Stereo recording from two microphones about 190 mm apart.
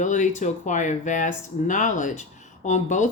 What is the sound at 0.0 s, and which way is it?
Speech, 40° left (ahead or behind).